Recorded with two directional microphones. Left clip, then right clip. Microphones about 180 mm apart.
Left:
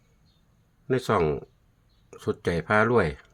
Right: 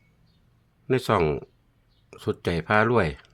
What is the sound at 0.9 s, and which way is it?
Speech, 15° right (ahead or behind).